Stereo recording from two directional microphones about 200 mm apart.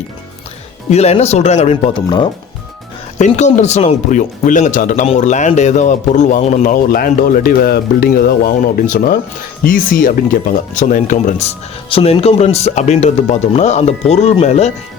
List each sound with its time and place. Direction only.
0.9 s speech: 30° left (ahead or behind)
3.2 s speech: 35° left (ahead or behind)